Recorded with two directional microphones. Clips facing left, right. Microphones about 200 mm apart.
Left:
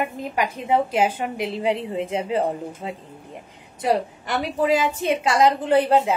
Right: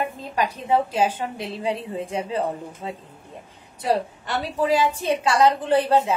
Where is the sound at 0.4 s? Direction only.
20° left (ahead or behind).